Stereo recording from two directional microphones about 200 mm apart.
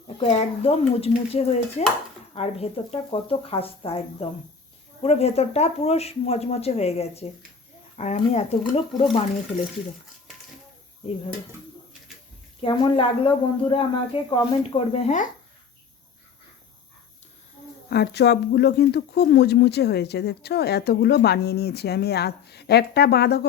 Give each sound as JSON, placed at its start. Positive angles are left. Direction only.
{"t": 0.2, "sound": "speech", "side_deg": 30}
{"t": 12.6, "sound": "speech", "side_deg": 25}
{"t": 17.8, "sound": "speech", "side_deg": 55}